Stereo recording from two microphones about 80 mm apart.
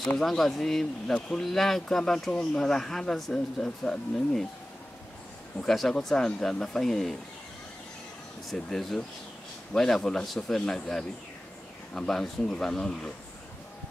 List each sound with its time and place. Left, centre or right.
0.2 s speech: centre
5.6 s speech: centre
8.5 s speech: centre